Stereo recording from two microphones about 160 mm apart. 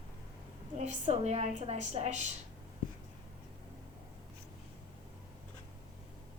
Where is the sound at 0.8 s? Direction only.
45° right (ahead or behind).